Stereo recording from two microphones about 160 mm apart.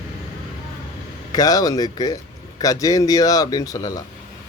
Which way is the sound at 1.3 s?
25° left (ahead or behind).